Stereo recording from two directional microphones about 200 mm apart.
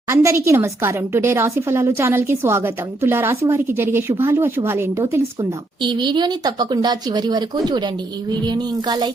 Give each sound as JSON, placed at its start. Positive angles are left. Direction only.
{"t": 0.1, "sound": "a woman's voice", "side_deg": -15}